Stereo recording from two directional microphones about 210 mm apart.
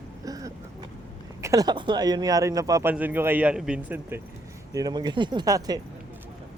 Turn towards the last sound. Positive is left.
turn(degrees=-15)  # may be behind; listen again after turning